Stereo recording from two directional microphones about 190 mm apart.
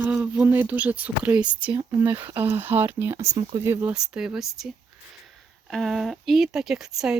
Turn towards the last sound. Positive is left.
turn(degrees=0)  # may be behind; listen again after turning